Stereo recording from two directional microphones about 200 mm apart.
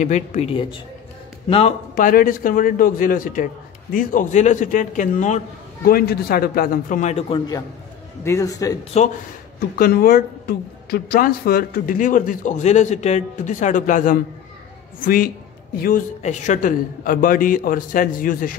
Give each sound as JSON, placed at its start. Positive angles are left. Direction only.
{"t": 0.0, "sound": "a woman's voice", "side_deg": 35}
{"t": 5.9, "sound": "a woman's voice", "side_deg": 50}
{"t": 9.0, "sound": "speech", "side_deg": 35}
{"t": 9.8, "sound": "a woman's voice", "side_deg": 50}